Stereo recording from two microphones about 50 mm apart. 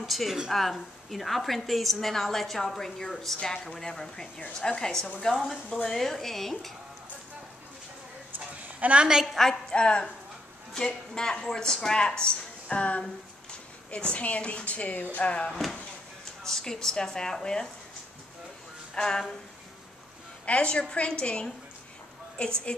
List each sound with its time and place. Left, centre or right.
0.0 s a woman's voice: centre
8.7 s a woman's voice: right
9.3 s a woman's voice: centre
11.1 s a woman's voice: centre
15.5 s a woman's voice: centre
18.9 s a woman's voice: centre
20.4 s speech: left